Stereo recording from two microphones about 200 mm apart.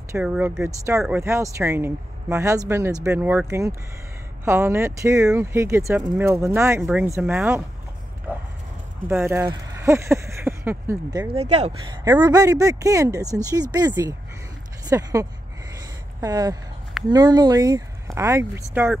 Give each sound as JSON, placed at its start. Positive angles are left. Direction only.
{"t": 0.1, "sound": "speech", "side_deg": -10}
{"t": 8.3, "sound": "a sound", "side_deg": -10}
{"t": 9.8, "sound": "speech", "side_deg": -15}
{"t": 11.3, "sound": "speech", "side_deg": -30}
{"t": 11.9, "sound": "speech", "side_deg": -20}